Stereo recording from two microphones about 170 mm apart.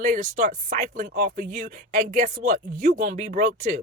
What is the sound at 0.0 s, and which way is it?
Speech, 50° right (ahead or behind).